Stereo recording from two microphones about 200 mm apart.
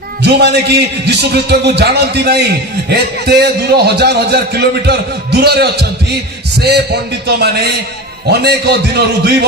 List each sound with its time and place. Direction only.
0.2 s a man's voice: 55° right (ahead or behind)